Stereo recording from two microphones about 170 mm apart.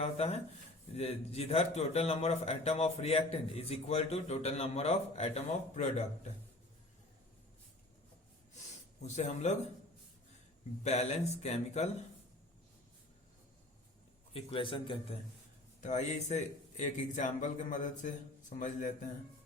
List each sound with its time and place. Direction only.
0.0 s a sound: 35° left (ahead or behind)
0.9 s a man's voice: 35° left (ahead or behind)
9.0 s a man's voice: 40° left (ahead or behind)
10.8 s a man's voice: 40° left (ahead or behind)
14.3 s a man's voice: 30° left (ahead or behind)
15.8 s a man's voice: 45° left (ahead or behind)